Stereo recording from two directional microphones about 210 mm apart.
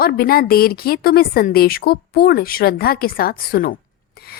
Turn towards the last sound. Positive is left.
turn(degrees=45)  # may be behind; listen again after turning